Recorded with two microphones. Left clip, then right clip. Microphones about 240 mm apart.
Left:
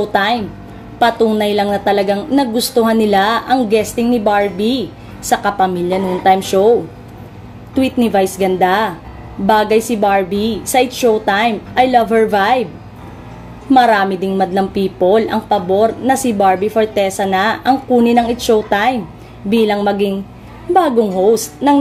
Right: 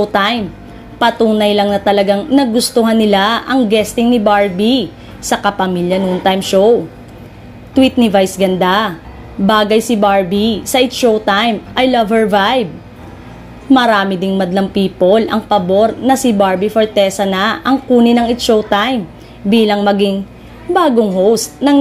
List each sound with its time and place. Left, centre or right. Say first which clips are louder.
0.0 s a woman's voice: right 1 dB; right
7.7 s a woman's voice: right 3 dB; centre
13.7 s a woman's voice: even; centre